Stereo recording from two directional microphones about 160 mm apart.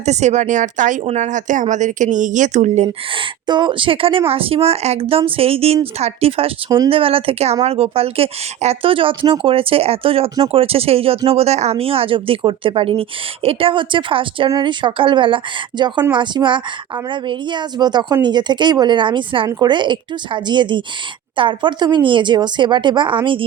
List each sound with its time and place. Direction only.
0.0 s a woman's voice: 45° right (ahead or behind)
3.4 s a woman's voice: 30° right (ahead or behind)